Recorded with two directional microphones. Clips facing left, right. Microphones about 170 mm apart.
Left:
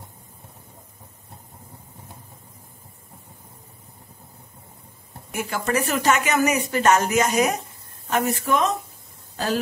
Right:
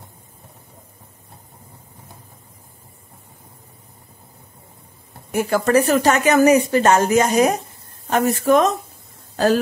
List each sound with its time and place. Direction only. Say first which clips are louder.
5.3 s a woman's voice: right 8 dB; 35° right (ahead or behind)